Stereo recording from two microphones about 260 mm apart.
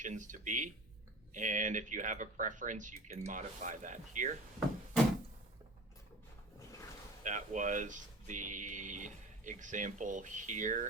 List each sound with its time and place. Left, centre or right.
0.0 s speech: right
7.3 s speech: right